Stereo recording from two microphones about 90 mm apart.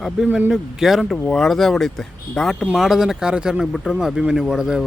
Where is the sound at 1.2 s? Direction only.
5° left (ahead or behind).